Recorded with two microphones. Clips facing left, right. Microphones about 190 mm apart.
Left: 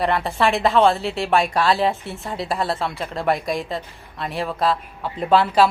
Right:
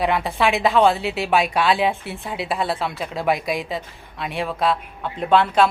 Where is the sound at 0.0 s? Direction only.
Centre (ahead or behind).